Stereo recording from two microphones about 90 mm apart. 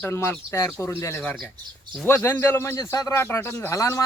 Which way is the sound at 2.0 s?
25° left (ahead or behind).